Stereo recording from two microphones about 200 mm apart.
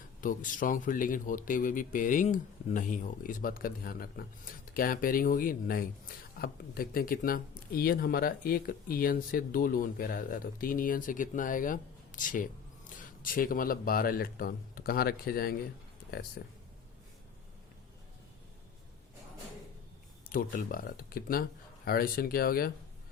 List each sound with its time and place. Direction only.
0.2 s speech: 40° left (ahead or behind)
20.3 s speech: 45° left (ahead or behind)